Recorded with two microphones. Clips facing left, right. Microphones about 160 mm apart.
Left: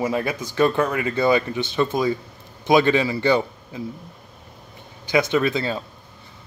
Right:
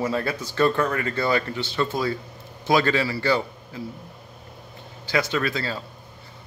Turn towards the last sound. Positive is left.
turn(degrees=20)  # may be behind; listen again after turning